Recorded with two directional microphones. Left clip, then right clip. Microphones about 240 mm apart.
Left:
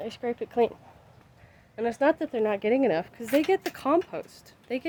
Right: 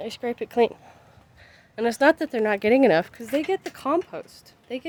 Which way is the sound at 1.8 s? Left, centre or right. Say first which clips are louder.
Right 5 dB; right.